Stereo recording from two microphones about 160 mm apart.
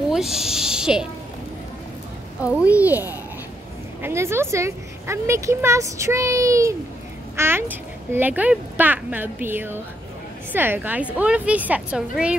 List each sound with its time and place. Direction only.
0.1 s snake: 5° right (ahead or behind)
2.4 s speech: 10° right (ahead or behind)